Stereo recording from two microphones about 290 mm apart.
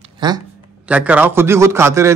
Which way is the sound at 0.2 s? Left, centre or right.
Centre.